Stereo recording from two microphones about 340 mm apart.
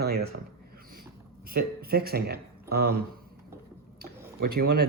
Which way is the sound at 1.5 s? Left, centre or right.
Right.